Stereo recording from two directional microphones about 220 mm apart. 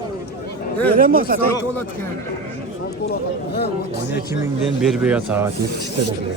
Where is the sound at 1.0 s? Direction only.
40° right (ahead or behind).